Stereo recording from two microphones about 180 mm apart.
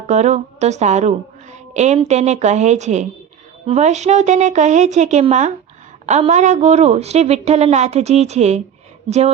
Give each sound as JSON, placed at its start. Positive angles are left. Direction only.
{"t": 0.1, "sound": "a woman's voice", "side_deg": -40}